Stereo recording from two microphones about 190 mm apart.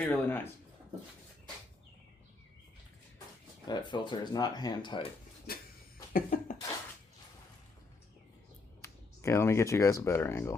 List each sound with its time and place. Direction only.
0.0 s speech: 10° left (ahead or behind)
3.7 s speech: 20° left (ahead or behind)
5.5 s a sound: 50° left (ahead or behind)
6.1 s cough: 45° left (ahead or behind)
8.8 s speech: 15° left (ahead or behind)